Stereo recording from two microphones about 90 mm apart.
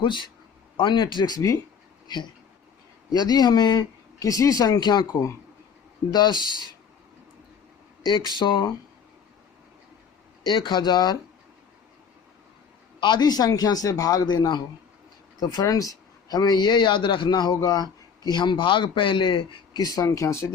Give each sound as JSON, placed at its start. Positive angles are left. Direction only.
{"t": 0.0, "sound": "speech", "side_deg": 60}
{"t": 3.1, "sound": "speech", "side_deg": 50}
{"t": 8.4, "sound": "speech", "side_deg": 60}
{"t": 10.4, "sound": "speech", "side_deg": 60}
{"t": 13.0, "sound": "speech", "side_deg": 55}
{"t": 19.8, "sound": "speech", "side_deg": 40}